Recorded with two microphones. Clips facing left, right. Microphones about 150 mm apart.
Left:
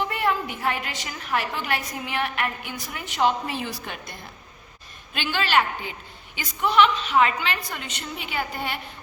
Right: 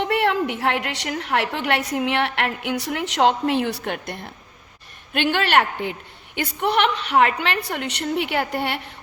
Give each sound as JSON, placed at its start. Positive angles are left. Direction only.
{"t": 0.0, "sound": "a woman's voice", "side_deg": -70}